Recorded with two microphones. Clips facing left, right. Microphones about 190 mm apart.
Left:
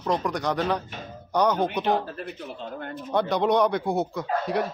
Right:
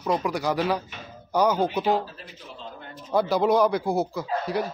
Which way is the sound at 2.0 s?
60° left (ahead or behind).